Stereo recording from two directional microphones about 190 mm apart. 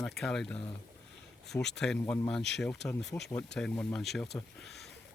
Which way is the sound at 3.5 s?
5° left (ahead or behind).